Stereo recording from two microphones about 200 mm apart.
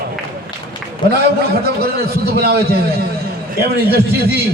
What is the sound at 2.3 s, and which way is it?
Speech, 50° right (ahead or behind).